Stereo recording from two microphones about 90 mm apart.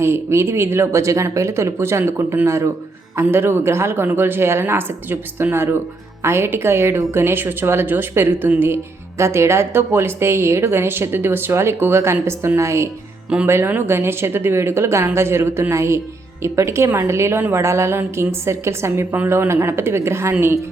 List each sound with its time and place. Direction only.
0.0 s a woman's voice: 30° right (ahead or behind)